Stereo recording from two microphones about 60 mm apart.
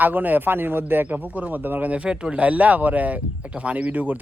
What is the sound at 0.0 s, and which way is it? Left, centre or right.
A man's voice, right.